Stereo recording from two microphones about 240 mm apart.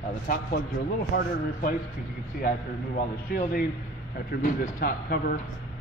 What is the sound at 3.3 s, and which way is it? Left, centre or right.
A man's voice, left.